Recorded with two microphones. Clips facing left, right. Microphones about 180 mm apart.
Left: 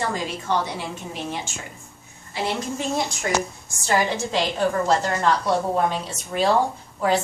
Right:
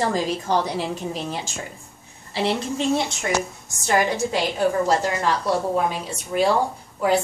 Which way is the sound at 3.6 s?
15° right (ahead or behind).